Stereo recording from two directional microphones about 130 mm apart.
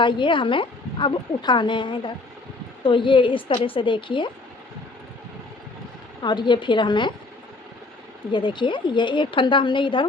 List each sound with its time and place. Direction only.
0.0 s a woman's voice: 40° left (ahead or behind)
6.2 s a woman's voice: 35° left (ahead or behind)
8.3 s a woman's voice: 35° left (ahead or behind)